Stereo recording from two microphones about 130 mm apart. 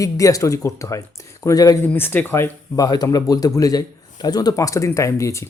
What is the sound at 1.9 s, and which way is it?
Speech, 15° left (ahead or behind).